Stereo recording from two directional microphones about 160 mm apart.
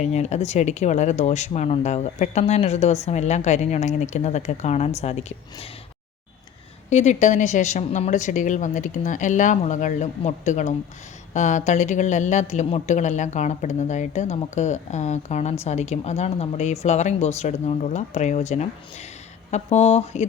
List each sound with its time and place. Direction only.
0.0 s speech: 45° left (ahead or behind)
6.9 s speech: 45° left (ahead or behind)